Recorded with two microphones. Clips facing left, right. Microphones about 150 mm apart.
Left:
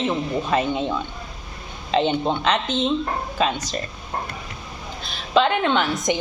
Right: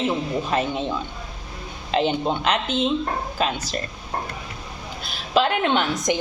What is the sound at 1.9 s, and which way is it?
A woman's voice, 5° right (ahead or behind).